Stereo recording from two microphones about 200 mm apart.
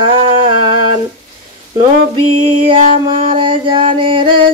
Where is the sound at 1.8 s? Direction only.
25° right (ahead or behind).